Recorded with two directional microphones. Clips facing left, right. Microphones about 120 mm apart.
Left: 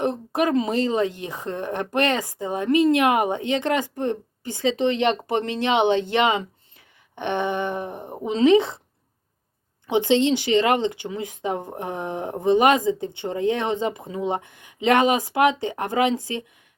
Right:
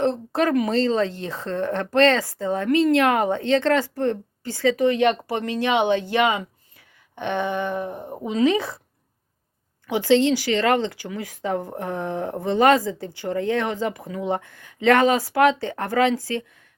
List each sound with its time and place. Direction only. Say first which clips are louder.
0.0 s a woman's voice: right 1 dB; 15° left (ahead or behind)
9.8 s a woman's voice: right 1 dB; 20° left (ahead or behind)